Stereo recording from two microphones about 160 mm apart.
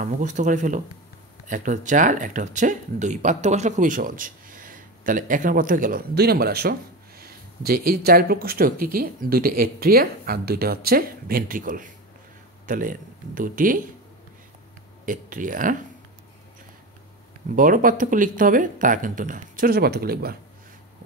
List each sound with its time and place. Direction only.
0.0 s speech: 50° right (ahead or behind)
15.0 s speech: 55° right (ahead or behind)
17.6 s speech: 60° right (ahead or behind); by 20.3 s 75° right (ahead or behind)